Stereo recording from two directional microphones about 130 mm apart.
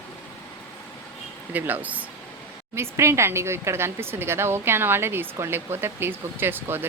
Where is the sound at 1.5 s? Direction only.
15° right (ahead or behind).